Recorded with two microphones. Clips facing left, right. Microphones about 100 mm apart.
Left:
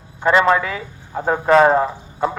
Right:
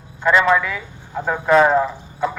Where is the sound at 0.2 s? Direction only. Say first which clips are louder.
Left 1 dB; 40° left (ahead or behind).